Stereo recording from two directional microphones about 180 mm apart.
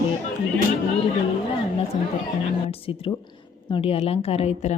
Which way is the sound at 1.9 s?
25° left (ahead or behind).